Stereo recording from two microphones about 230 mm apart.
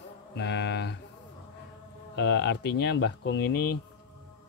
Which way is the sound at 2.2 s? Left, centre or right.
Left.